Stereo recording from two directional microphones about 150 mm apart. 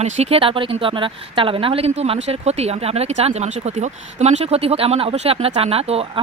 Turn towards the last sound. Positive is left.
turn(degrees=-40)  # may be behind; listen again after turning